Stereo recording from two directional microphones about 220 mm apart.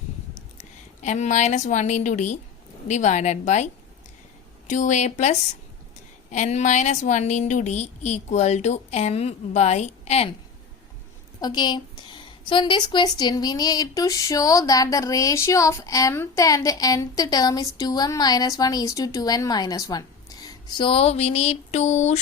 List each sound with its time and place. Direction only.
1.0 s a woman's voice: 30° left (ahead or behind)
4.7 s a woman's voice: 35° left (ahead or behind)
11.3 s a woman's voice: 20° left (ahead or behind)
20.5 s a sound: 20° left (ahead or behind)